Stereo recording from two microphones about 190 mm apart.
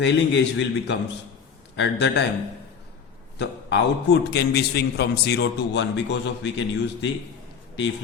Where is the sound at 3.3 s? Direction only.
70° left (ahead or behind).